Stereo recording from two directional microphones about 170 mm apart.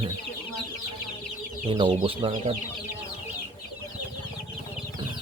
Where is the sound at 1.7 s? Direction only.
30° right (ahead or behind).